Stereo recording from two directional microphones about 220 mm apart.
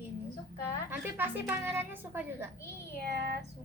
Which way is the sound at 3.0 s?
50° right (ahead or behind).